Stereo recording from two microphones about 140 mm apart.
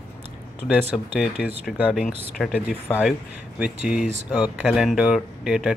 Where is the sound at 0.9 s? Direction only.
5° right (ahead or behind).